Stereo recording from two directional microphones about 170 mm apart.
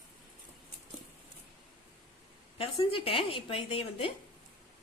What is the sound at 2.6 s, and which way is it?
A woman's voice, 35° left (ahead or behind).